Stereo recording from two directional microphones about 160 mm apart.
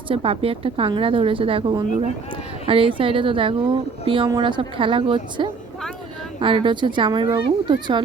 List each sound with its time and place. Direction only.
0.1 s speech: 35° right (ahead or behind)